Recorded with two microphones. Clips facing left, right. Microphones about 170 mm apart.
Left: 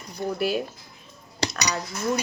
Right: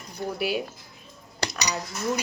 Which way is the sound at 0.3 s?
10° right (ahead or behind).